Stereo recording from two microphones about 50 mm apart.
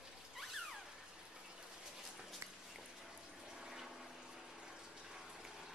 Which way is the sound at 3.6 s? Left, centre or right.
Centre.